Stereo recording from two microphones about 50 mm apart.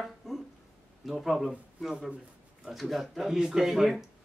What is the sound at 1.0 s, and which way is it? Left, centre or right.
Speech, centre.